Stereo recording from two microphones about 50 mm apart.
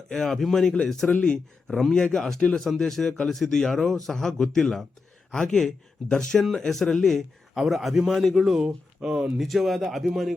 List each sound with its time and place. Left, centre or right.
0.1 s a man's voice: centre
1.1 s speech: left
1.6 s speech: centre
2.0 s speech: left
2.2 s a man's voice: centre
7.5 s a man's voice: centre
8.6 s speech: centre
9.4 s a man's voice: centre